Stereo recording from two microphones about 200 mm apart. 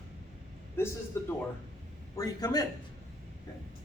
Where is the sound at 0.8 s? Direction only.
10° left (ahead or behind).